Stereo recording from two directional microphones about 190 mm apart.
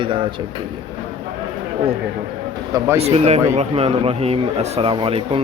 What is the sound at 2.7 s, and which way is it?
Speech, 15° right (ahead or behind).